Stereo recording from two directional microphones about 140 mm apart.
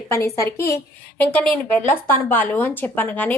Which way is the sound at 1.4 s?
5° left (ahead or behind).